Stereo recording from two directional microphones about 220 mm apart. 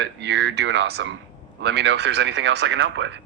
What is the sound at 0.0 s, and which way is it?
Speech, 50° right (ahead or behind).